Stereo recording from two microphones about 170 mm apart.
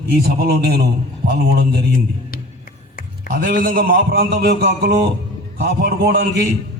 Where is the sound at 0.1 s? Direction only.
65° right (ahead or behind).